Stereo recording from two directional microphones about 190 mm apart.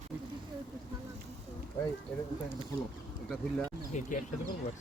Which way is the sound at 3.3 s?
5° left (ahead or behind).